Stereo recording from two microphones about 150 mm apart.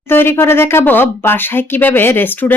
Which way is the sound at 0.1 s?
15° left (ahead or behind).